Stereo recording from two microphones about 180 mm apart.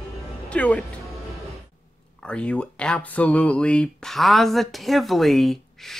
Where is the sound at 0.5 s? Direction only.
5° left (ahead or behind).